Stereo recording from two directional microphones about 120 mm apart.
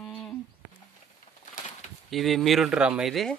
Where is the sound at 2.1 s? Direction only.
Centre (ahead or behind).